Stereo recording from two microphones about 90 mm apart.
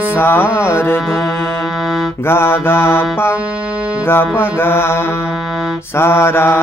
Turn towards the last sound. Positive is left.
turn(degrees=25)  # may be behind; listen again after turning